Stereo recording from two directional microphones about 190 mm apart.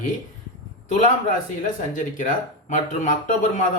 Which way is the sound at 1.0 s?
40° left (ahead or behind).